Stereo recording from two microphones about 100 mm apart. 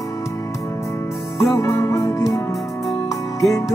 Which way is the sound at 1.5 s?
30° left (ahead or behind).